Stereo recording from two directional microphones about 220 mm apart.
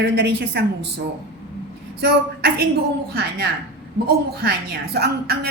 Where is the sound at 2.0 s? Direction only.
45° right (ahead or behind).